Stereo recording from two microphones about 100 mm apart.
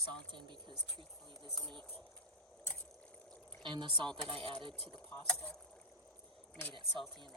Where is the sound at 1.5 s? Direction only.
5° left (ahead or behind).